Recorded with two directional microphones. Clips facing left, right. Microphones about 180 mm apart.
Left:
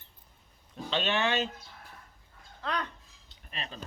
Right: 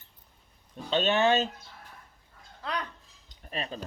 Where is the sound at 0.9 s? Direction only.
40° right (ahead or behind).